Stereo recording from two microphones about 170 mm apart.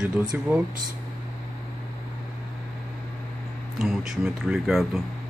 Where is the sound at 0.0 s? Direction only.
5° right (ahead or behind).